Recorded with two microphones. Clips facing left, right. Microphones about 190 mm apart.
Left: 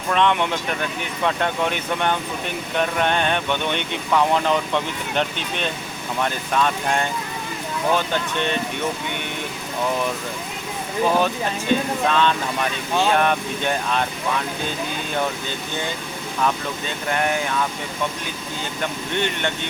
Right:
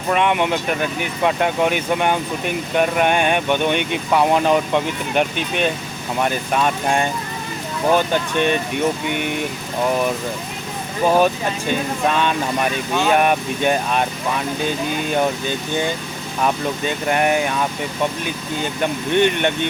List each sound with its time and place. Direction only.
0.1 s speech: 10° right (ahead or behind)
11.0 s speech: 10° right (ahead or behind)